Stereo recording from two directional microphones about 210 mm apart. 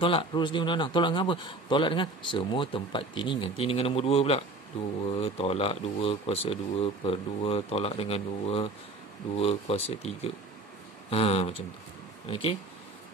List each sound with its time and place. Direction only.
0.0 s speech: 25° left (ahead or behind)